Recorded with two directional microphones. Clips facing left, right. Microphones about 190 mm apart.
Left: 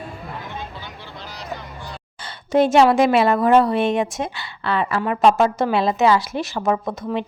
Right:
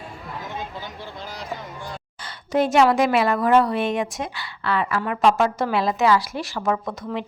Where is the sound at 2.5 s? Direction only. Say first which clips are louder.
Left 3 dB; 25° left (ahead or behind).